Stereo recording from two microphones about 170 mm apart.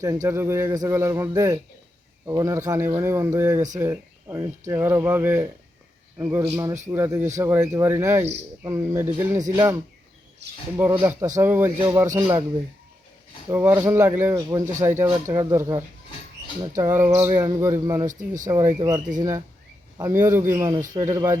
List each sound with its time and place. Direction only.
0.0 s speech: 20° right (ahead or behind)
11.0 s speech: 15° right (ahead or behind)
13.5 s speech: 15° right (ahead or behind)
16.8 s speech: 15° right (ahead or behind)
18.0 s speech: 50° right (ahead or behind)
18.4 s speech: 20° right (ahead or behind)